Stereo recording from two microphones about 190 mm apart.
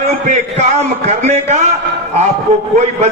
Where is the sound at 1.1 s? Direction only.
35° right (ahead or behind).